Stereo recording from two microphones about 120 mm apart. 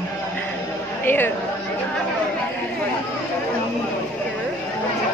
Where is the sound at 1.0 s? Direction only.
15° left (ahead or behind).